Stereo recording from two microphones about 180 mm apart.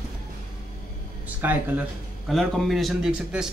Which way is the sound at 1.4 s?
10° right (ahead or behind).